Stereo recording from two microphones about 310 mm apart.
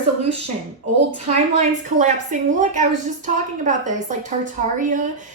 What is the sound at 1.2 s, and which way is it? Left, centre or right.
A woman's voice, right.